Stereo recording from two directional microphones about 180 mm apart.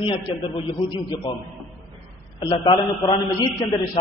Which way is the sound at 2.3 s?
25° left (ahead or behind).